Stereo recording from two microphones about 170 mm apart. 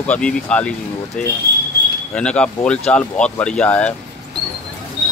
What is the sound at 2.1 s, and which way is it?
Speech, 5° left (ahead or behind).